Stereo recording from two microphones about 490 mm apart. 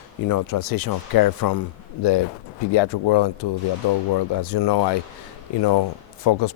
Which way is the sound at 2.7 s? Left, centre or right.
Left.